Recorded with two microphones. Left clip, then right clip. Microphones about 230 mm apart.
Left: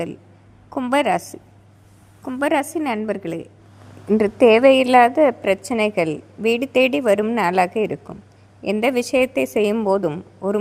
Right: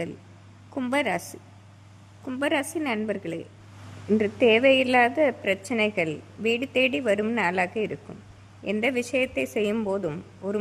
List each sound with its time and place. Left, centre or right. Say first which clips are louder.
0.7 s a woman's voice: left 7 dB; centre